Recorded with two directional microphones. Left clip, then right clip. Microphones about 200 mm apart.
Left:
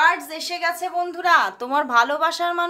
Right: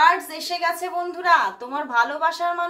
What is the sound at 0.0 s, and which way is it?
A woman's voice, 25° left (ahead or behind).